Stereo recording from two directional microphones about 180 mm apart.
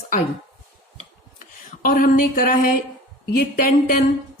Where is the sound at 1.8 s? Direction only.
50° left (ahead or behind).